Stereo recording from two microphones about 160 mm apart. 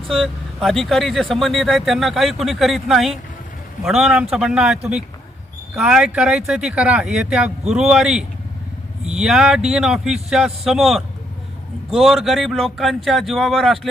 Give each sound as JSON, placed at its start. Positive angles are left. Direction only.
{"t": 0.1, "sound": "speech", "side_deg": 0}